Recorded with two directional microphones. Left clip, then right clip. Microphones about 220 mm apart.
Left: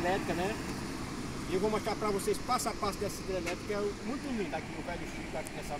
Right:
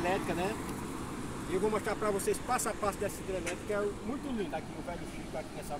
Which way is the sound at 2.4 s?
25° left (ahead or behind).